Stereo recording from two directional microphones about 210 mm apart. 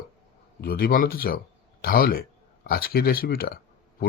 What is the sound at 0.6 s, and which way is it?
Speech, 45° left (ahead or behind).